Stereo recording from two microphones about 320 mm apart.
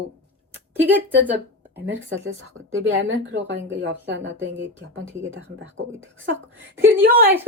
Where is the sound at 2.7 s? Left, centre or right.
Right.